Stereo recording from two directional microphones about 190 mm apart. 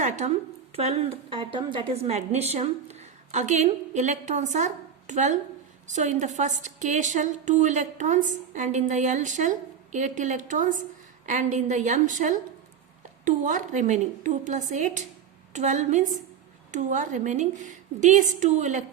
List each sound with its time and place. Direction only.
0.2 s a woman's voice: 40° right (ahead or behind)
1.3 s a woman's voice: 25° right (ahead or behind)